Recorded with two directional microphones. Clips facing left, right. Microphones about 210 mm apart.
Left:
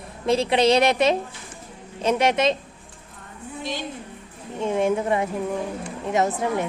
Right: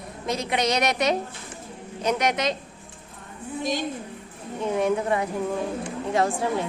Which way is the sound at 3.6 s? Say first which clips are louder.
Right 4 dB; 45° right (ahead or behind).